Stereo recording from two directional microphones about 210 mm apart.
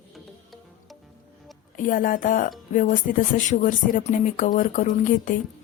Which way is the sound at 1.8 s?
40° left (ahead or behind).